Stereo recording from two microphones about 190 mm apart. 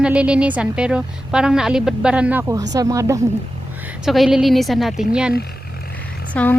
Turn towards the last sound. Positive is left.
turn(degrees=5)  # may be behind; listen again after turning